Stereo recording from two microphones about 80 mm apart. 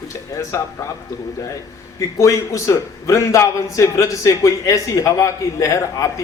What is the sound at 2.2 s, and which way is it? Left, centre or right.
A man's voice, left.